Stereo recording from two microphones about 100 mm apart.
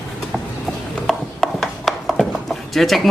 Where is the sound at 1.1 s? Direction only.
Centre (ahead or behind).